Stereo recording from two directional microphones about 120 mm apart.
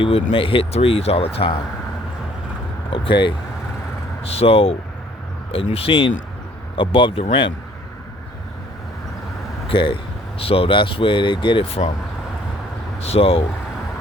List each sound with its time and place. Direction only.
0.0 s speech: 50° left (ahead or behind)
2.9 s speech: 45° left (ahead or behind)
4.2 s speech: 55° left (ahead or behind)
9.6 s speech: 45° left (ahead or behind)
13.0 s speech: 55° left (ahead or behind)